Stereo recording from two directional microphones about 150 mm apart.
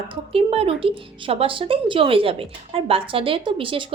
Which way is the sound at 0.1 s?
40° right (ahead or behind).